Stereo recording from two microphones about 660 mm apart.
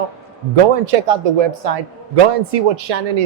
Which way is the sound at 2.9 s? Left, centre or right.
Right.